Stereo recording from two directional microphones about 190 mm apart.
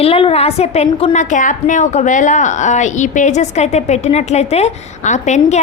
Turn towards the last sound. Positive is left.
turn(degrees=35)  # may be behind; listen again after turning